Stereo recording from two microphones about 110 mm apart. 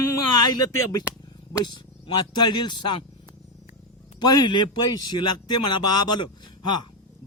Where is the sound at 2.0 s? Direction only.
40° left (ahead or behind).